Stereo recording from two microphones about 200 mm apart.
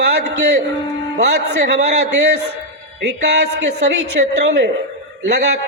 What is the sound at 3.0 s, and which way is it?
A man's voice, 55° right (ahead or behind).